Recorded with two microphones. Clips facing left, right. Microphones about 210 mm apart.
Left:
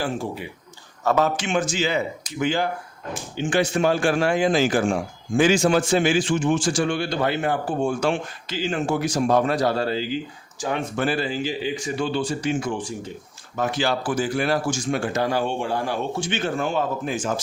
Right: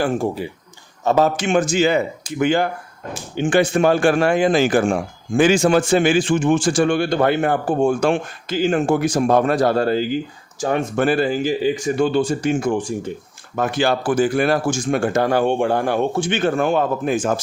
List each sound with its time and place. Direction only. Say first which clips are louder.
0.0 s speech: right 7 dB; 45° right (ahead or behind)
1.0 s speech: right 4 dB; 30° right (ahead or behind)
1.4 s speech: right 6 dB; 45° right (ahead or behind)